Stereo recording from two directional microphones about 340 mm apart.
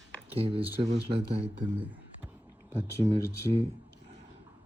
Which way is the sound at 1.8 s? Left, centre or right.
Centre.